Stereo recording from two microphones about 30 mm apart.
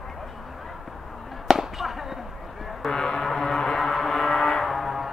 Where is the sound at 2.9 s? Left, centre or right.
Centre.